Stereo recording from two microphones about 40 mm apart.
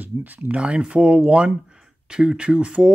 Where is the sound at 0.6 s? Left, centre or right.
Right.